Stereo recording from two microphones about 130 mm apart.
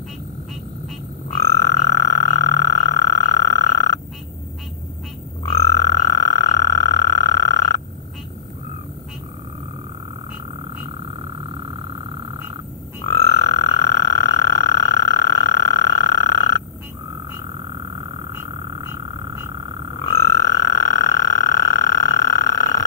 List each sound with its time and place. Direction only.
1.4 s frog: 25° left (ahead or behind)
5.4 s frog: 25° left (ahead or behind)
11.1 s vehicle: 40° right (ahead or behind)
13.0 s frog: 20° left (ahead or behind)
17.7 s frog: 35° right (ahead or behind)
18.9 s frog: 20° right (ahead or behind)
19.5 s frog: 35° right (ahead or behind)
20.1 s frog: 20° left (ahead or behind)